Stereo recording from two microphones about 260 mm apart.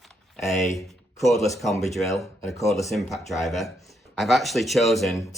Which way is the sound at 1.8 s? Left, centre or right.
Centre.